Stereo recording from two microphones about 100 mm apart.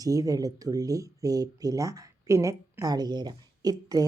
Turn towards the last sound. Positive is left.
turn(degrees=-40)  # may be behind; listen again after turning